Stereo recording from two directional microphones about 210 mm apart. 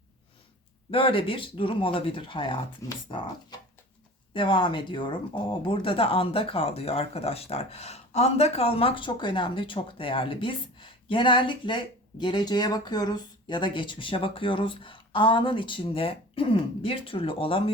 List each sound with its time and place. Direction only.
0.9 s speech: 25° left (ahead or behind)
4.4 s speech: 25° left (ahead or behind)